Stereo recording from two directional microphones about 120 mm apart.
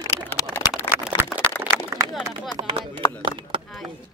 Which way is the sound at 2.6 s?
40° right (ahead or behind).